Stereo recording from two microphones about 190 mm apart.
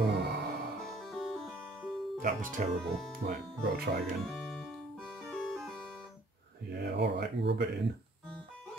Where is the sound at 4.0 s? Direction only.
5° left (ahead or behind).